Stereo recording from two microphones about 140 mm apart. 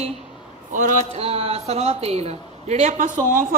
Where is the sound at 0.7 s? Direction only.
65° right (ahead or behind).